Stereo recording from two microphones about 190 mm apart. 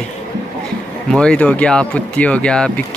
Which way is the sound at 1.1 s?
5° left (ahead or behind).